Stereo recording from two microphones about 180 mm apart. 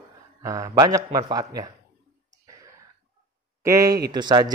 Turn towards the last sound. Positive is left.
turn(degrees=-25)  # may be behind; listen again after turning